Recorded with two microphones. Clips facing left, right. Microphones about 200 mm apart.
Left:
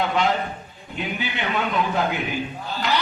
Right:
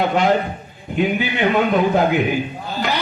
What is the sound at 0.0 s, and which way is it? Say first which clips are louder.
A man's voice: right 5 dB; 50° right (ahead or behind).